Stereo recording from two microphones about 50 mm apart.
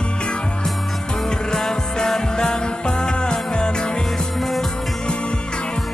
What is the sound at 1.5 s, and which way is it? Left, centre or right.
Music, centre.